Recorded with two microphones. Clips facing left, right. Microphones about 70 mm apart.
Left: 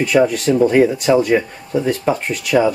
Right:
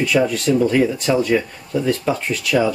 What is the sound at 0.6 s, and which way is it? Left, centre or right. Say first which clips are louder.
Speech: left 6 dB; left.